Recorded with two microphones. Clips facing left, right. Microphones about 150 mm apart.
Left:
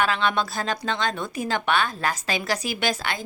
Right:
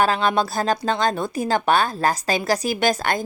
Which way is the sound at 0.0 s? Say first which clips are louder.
Right 4 dB; 40° right (ahead or behind).